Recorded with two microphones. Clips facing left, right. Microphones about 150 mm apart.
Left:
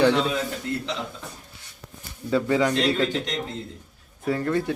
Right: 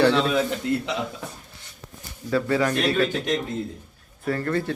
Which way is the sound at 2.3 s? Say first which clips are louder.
Left 1 dB; 20° left (ahead or behind).